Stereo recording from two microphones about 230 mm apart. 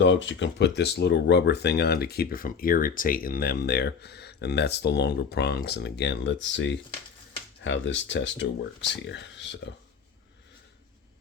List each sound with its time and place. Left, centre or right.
0.0 s speech: left